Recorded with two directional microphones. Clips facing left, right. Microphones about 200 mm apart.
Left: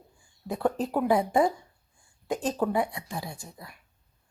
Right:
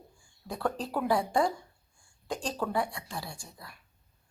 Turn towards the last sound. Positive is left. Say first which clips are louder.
# left 4 dB
turn(degrees=20)  # may be behind; listen again after turning